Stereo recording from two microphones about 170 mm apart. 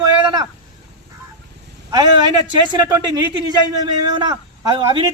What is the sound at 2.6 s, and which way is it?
Speech, 25° right (ahead or behind).